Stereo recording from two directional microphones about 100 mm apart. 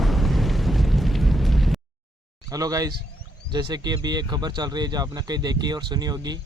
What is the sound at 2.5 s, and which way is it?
Speech, 35° right (ahead or behind).